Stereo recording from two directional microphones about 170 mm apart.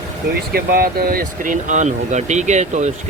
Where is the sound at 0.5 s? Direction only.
60° right (ahead or behind).